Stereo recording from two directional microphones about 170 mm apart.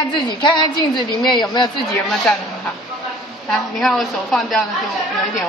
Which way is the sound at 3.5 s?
Centre (ahead or behind).